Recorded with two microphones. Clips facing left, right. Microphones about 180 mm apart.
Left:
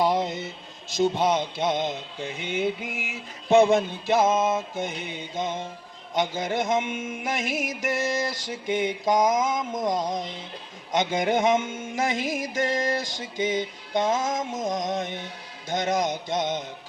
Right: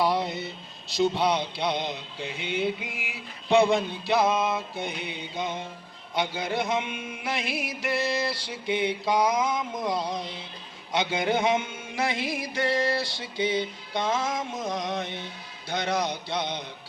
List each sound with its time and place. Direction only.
0.0 s a sound: 15° left (ahead or behind)
1.2 s music: 45° left (ahead or behind)
6.1 s music: 45° left (ahead or behind)